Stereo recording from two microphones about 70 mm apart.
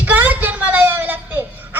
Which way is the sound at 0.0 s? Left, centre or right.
Right.